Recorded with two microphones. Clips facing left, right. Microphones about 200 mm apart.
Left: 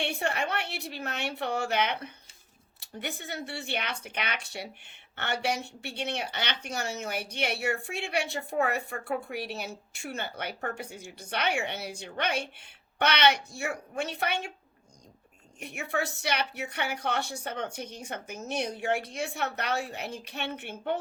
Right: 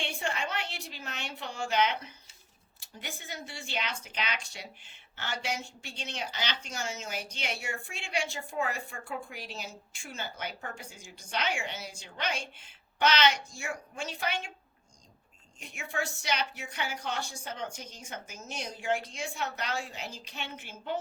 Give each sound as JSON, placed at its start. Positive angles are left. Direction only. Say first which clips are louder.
{"t": 0.0, "sound": "a woman's voice", "louder": "left 4 dB", "side_deg": 65}
{"t": 15.6, "sound": "a woman's voice", "louder": "left 4 dB", "side_deg": 65}